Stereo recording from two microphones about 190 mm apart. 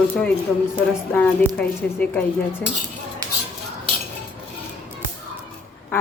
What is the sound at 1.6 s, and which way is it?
A woman's voice, 10° left (ahead or behind).